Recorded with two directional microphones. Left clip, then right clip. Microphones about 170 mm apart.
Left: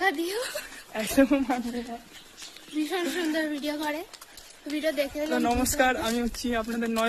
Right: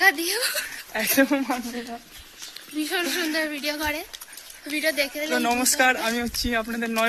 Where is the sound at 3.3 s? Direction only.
30° left (ahead or behind).